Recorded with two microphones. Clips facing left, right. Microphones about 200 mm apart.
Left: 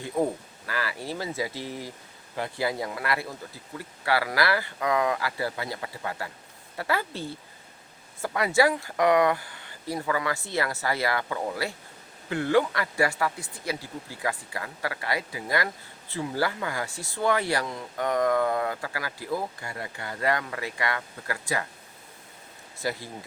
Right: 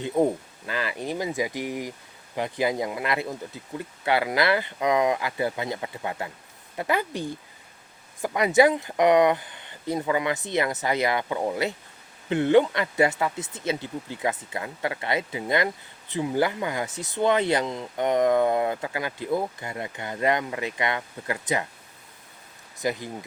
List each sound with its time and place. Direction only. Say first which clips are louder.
0.0 s speech: right 4 dB; 20° right (ahead or behind)
22.8 s speech: right 4 dB; 20° right (ahead or behind)